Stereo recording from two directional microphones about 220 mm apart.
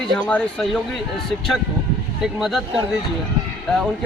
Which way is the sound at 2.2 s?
Centre (ahead or behind).